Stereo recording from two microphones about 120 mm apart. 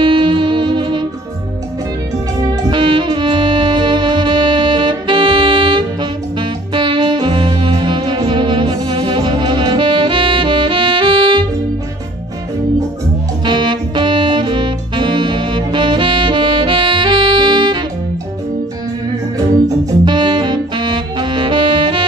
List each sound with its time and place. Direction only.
0.0 s music: 40° right (ahead or behind)
2.7 s music: 40° right (ahead or behind)
6.7 s saxophone: 40° right (ahead or behind)
13.5 s saxophone: 40° right (ahead or behind)
20.1 s saxophone: 40° right (ahead or behind)